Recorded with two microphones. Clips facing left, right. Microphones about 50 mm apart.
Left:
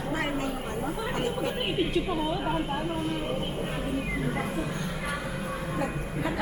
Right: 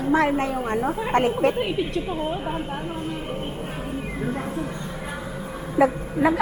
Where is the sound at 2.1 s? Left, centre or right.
Right.